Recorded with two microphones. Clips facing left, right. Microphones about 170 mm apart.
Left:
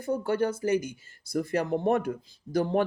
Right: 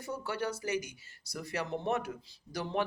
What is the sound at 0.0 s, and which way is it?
Speech, 50° left (ahead or behind).